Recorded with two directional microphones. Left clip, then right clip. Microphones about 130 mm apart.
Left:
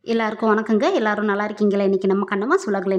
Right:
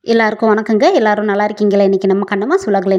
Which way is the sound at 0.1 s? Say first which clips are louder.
Right 8 dB; 40° right (ahead or behind).